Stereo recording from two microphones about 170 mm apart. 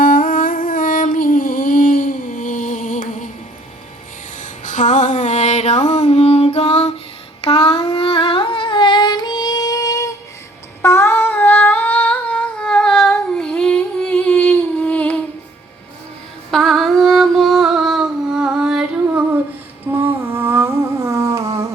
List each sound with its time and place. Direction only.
0.0 s music: 55° left (ahead or behind)
4.4 s music: 45° left (ahead or behind)
7.4 s humming: 35° left (ahead or behind); by 15.2 s 10° left (ahead or behind)
16.5 s a sound: centre (ahead or behind)
19.9 s humming: 15° right (ahead or behind)